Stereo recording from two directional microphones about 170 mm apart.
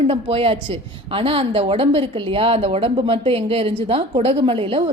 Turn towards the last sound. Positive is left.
turn(degrees=-35)  # may be behind; listen again after turning